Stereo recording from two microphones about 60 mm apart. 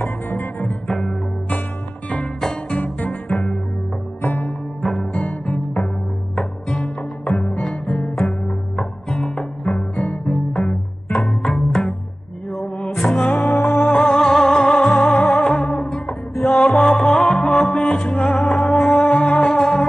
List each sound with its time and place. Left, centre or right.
0.0 s music: left
0.8 s music: centre
2.4 s music: centre
2.8 s music: left
3.3 s music: centre
4.2 s music: left
4.5 s music: centre
5.2 s music: left
6.3 s music: centre
9.8 s music: centre
10.2 s music: centre
17.9 s music: centre
18.2 s music: centre